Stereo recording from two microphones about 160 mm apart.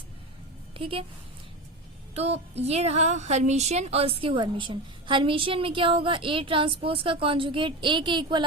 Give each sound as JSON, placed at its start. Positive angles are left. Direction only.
{"t": 0.8, "sound": "a woman's voice", "side_deg": -35}
{"t": 2.1, "sound": "a woman's voice", "side_deg": -40}